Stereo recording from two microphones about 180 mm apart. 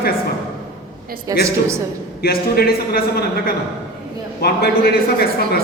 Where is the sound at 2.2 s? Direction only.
60° left (ahead or behind).